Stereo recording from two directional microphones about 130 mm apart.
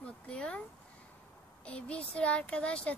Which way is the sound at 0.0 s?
10° left (ahead or behind).